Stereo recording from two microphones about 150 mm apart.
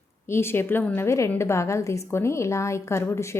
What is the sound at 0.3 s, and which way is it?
A woman's voice, 15° left (ahead or behind).